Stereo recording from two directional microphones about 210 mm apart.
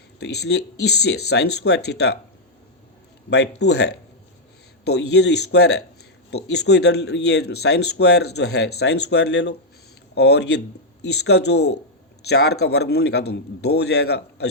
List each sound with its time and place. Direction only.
0.2 s a man's voice: 50° left (ahead or behind)
3.2 s a man's voice: 55° left (ahead or behind)